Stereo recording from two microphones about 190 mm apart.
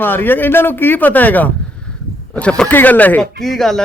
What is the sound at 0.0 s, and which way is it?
A man's voice, 10° left (ahead or behind).